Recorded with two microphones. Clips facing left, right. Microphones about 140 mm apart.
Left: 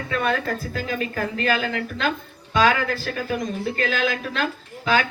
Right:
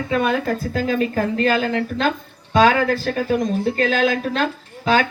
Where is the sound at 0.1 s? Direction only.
20° right (ahead or behind).